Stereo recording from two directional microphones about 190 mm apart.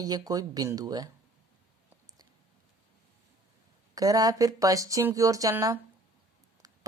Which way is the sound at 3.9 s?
20° right (ahead or behind).